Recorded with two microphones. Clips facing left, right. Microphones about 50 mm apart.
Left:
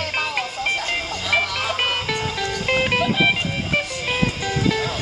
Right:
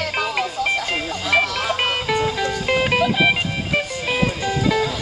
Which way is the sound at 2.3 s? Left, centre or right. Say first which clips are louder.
Right 3 dB; centre.